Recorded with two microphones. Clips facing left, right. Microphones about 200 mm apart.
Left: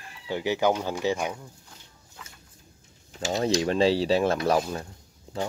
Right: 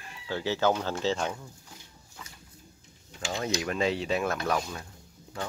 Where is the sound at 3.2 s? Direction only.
35° left (ahead or behind).